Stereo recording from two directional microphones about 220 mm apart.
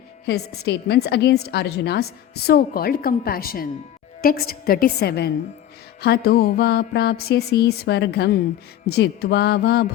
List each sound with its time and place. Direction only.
0.3 s a woman's voice: 45° left (ahead or behind)